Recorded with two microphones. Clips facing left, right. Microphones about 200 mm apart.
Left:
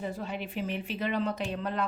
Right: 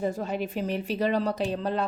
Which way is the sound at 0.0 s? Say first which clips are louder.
Right 6 dB; 45° right (ahead or behind).